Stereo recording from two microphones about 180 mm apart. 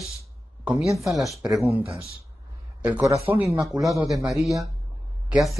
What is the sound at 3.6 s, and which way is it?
Speech, centre (ahead or behind).